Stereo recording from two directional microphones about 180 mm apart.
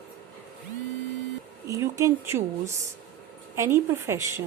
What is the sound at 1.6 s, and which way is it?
A woman's voice, 15° right (ahead or behind).